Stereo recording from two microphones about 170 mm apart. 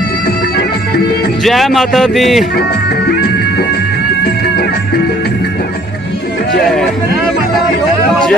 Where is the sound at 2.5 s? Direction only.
65° left (ahead or behind).